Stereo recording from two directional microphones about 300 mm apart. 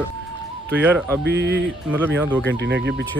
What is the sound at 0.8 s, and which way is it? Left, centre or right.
Speech, centre.